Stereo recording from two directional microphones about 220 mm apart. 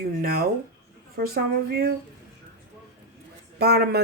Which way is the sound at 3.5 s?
45° right (ahead or behind).